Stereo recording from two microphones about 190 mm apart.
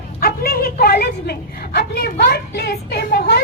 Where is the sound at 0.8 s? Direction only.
55° left (ahead or behind).